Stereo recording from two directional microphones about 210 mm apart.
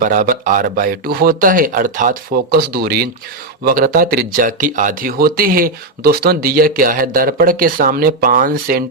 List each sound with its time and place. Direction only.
0.0 s speech: 40° right (ahead or behind)